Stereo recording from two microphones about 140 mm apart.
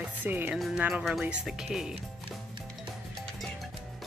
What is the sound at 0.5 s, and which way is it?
Speech, centre (ahead or behind).